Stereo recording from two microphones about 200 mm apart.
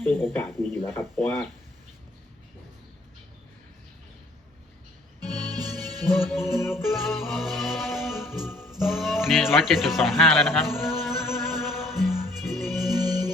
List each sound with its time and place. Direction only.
0.0 s speech: 10° left (ahead or behind)
5.5 s music: 20° right (ahead or behind)
6.6 s speech: 10° left (ahead or behind)
6.9 s music: centre (ahead or behind)
13.0 s music: 20° right (ahead or behind)